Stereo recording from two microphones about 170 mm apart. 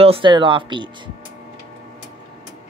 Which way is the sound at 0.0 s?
30° right (ahead or behind).